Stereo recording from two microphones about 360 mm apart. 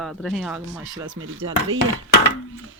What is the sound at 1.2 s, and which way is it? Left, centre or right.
Speech, right.